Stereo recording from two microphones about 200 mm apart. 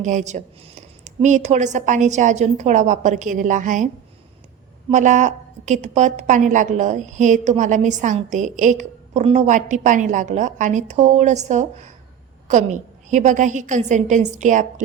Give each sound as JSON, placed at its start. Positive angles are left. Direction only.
{"t": 0.0, "sound": "a woman's voice", "side_deg": -35}
{"t": 4.9, "sound": "a woman's voice", "side_deg": -40}